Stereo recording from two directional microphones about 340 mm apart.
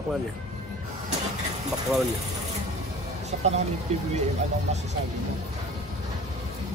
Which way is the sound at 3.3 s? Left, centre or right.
Right.